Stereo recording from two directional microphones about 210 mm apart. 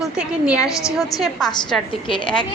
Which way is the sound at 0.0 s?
5° right (ahead or behind).